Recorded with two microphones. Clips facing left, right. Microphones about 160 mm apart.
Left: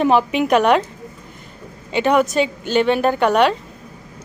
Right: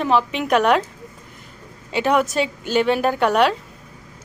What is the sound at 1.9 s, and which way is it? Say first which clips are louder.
Speech: left 3 dB; centre (ahead or behind).